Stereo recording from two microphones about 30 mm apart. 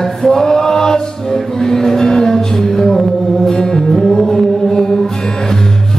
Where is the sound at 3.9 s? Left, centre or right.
Centre.